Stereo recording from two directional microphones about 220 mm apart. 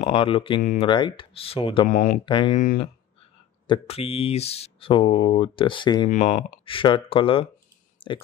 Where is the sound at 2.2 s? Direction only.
20° left (ahead or behind).